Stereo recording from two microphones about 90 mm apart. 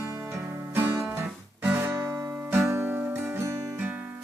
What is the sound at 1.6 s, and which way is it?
Guitar, 25° right (ahead or behind).